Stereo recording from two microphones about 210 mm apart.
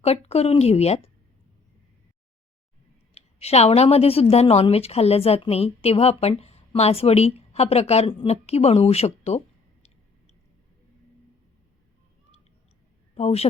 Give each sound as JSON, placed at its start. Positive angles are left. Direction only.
{"t": 0.0, "sound": "a woman's voice", "side_deg": 30}
{"t": 3.2, "sound": "a woman's voice", "side_deg": 30}
{"t": 13.1, "sound": "a woman's voice", "side_deg": 30}